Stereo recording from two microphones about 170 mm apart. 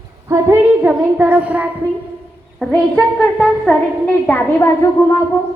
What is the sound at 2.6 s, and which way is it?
A woman's voice, 5° left (ahead or behind).